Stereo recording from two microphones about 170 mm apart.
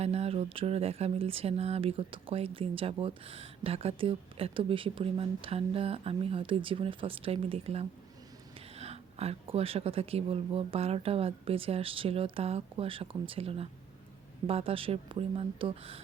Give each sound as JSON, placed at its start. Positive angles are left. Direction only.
{"t": 0.0, "sound": "speech", "side_deg": -40}